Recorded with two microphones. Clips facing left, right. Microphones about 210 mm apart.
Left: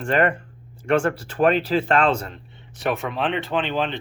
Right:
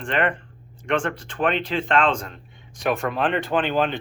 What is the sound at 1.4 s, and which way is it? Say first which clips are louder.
Speech: left 5 dB; 40° left (ahead or behind).